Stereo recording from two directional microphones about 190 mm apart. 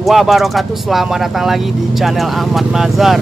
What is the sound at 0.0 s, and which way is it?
Speech, centre (ahead or behind).